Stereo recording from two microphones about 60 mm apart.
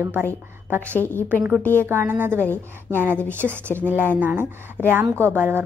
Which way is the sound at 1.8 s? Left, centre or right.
Right.